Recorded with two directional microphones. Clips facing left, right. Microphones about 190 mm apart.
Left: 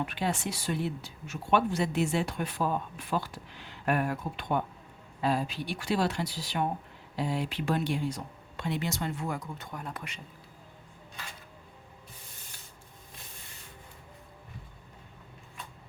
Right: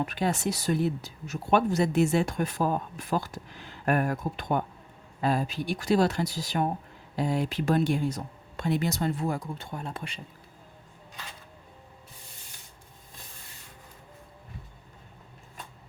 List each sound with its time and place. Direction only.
0.0 s speech: 45° right (ahead or behind)